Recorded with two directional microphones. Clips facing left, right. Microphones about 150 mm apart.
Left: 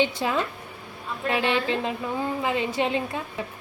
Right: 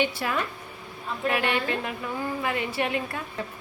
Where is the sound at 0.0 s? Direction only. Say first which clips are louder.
Left 3 dB; 20° left (ahead or behind).